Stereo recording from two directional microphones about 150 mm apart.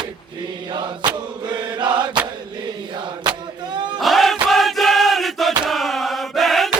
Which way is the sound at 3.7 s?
30° right (ahead or behind).